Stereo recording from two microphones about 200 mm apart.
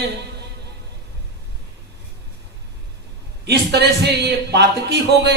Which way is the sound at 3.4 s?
55° right (ahead or behind).